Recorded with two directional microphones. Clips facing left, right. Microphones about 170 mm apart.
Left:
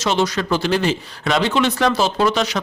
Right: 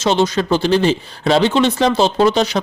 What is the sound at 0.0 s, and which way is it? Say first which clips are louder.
Speech: right 4 dB; 25° right (ahead or behind).